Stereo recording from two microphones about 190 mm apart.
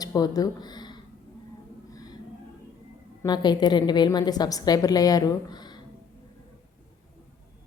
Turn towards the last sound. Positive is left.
turn(degrees=20)  # may be behind; listen again after turning